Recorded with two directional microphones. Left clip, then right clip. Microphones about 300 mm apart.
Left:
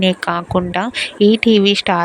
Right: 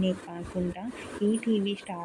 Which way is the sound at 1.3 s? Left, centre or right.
Left.